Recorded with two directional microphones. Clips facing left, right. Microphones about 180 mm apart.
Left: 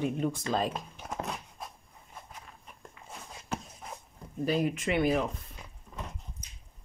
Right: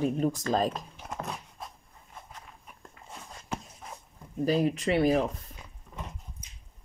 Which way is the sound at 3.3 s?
5° left (ahead or behind).